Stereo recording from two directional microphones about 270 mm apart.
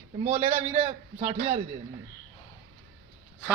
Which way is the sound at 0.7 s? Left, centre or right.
Right.